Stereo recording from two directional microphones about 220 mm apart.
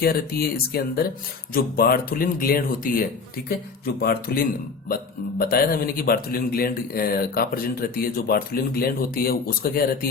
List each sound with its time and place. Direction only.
0.0 s speech: 45° left (ahead or behind)
5.4 s speech: 45° left (ahead or behind)